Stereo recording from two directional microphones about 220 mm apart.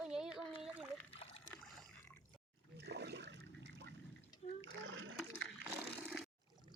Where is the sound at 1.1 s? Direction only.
25° left (ahead or behind).